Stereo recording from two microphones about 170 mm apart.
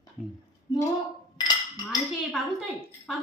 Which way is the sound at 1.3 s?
25° left (ahead or behind).